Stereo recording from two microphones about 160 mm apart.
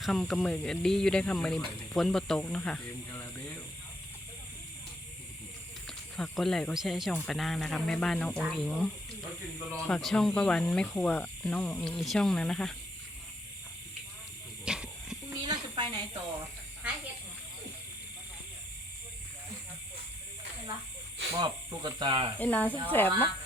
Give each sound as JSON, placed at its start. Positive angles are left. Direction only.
{"t": 0.0, "sound": "speech", "side_deg": 0}
{"t": 3.1, "sound": "a sound", "side_deg": 15}
{"t": 6.1, "sound": "speech", "side_deg": 0}
{"t": 14.6, "sound": "snake", "side_deg": -5}
{"t": 15.3, "sound": "a sound", "side_deg": -25}
{"t": 21.3, "sound": "speech", "side_deg": -30}
{"t": 22.4, "sound": "speech", "side_deg": 10}